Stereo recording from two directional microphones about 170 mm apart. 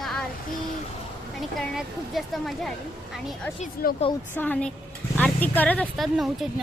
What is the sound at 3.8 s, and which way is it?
Speech, 60° left (ahead or behind).